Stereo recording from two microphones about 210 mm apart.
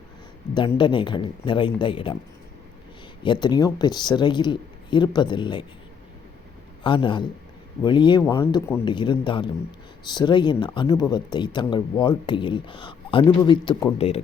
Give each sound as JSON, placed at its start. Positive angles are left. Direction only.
{"t": 0.8, "sound": "speech", "side_deg": 25}
{"t": 3.2, "sound": "speech", "side_deg": 20}
{"t": 6.8, "sound": "speech", "side_deg": 25}